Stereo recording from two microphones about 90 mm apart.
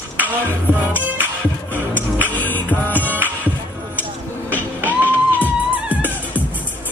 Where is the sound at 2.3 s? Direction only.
20° left (ahead or behind).